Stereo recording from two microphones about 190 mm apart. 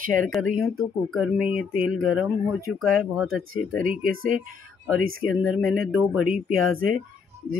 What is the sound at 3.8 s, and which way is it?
Speech, 45° right (ahead or behind).